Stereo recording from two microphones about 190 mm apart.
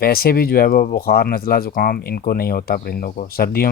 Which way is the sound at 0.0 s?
55° left (ahead or behind).